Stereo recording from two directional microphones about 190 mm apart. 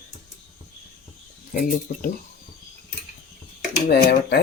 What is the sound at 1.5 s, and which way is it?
Speech, 50° left (ahead or behind).